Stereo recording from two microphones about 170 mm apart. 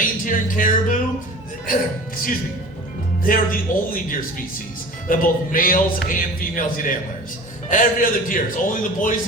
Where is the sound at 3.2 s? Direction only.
55° left (ahead or behind).